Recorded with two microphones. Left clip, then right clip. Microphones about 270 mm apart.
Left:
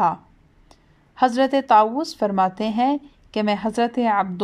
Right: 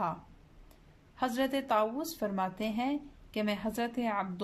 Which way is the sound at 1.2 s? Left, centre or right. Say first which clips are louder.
Left 14 dB; centre.